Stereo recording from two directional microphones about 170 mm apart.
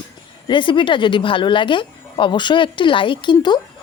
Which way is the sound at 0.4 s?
30° left (ahead or behind).